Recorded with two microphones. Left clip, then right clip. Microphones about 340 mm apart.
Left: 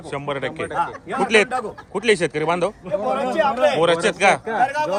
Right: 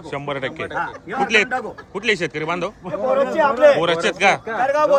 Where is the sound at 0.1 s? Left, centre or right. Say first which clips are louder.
Even; centre.